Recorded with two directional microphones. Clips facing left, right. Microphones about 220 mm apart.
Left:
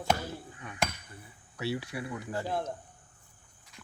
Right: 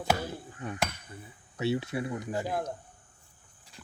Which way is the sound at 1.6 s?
25° right (ahead or behind).